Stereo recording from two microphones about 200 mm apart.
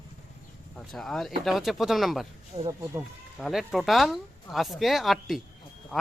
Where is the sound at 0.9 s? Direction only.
Centre (ahead or behind).